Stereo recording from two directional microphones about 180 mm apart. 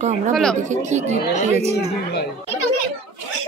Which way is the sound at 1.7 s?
65° left (ahead or behind).